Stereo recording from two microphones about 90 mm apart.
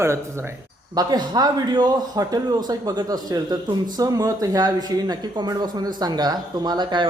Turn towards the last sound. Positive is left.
turn(degrees=-60)  # may be behind; listen again after turning